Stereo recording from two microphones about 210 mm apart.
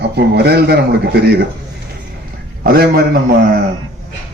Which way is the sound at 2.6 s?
45° right (ahead or behind).